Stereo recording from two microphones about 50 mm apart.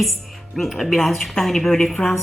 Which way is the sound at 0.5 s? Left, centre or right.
Centre.